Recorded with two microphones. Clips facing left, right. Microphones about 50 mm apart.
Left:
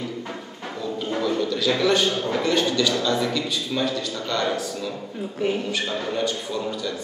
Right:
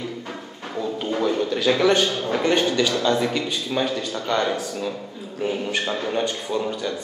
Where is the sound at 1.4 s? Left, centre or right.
Right.